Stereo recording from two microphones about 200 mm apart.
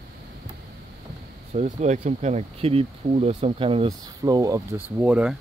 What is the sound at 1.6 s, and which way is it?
Speech, 35° right (ahead or behind).